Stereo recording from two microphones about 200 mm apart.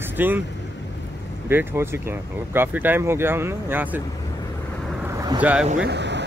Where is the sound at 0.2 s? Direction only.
10° right (ahead or behind).